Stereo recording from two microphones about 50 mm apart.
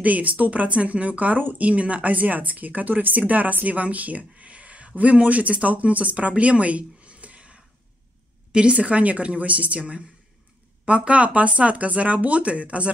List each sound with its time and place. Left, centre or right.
0.0 s speech: right